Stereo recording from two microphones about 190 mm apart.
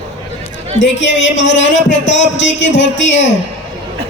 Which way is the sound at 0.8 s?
70° left (ahead or behind).